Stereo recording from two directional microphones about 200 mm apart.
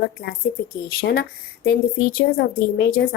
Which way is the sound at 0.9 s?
50° left (ahead or behind).